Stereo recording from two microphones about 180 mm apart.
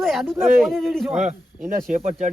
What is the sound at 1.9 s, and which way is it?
Speech, 40° right (ahead or behind).